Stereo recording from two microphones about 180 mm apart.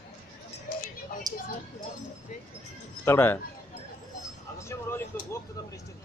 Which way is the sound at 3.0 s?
10° left (ahead or behind).